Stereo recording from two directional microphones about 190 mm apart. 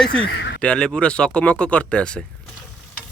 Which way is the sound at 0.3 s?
65° left (ahead or behind).